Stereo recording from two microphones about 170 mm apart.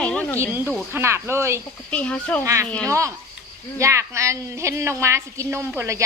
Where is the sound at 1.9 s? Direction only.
5° left (ahead or behind).